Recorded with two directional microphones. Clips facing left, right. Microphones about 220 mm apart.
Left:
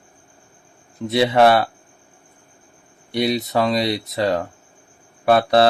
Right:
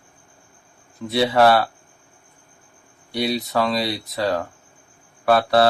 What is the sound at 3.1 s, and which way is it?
Speech, 20° left (ahead or behind).